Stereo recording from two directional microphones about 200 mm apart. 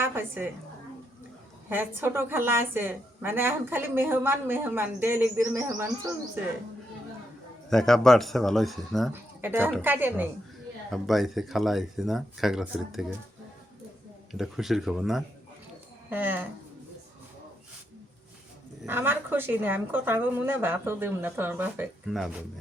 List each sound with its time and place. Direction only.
0.0 s a woman's voice: 10° right (ahead or behind)
1.7 s a woman's voice: 10° right (ahead or behind)
7.7 s speech: centre (ahead or behind)
9.4 s a woman's voice: 10° right (ahead or behind)
14.3 s a woman's voice: centre (ahead or behind)
18.9 s a woman's voice: 10° right (ahead or behind)